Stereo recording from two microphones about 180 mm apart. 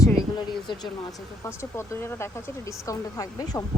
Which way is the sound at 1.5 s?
15° left (ahead or behind).